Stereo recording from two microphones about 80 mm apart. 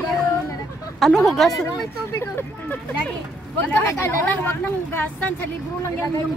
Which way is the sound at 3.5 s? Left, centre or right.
Left.